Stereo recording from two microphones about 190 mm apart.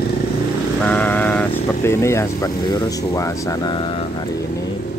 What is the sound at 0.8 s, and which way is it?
Speech, 10° left (ahead or behind).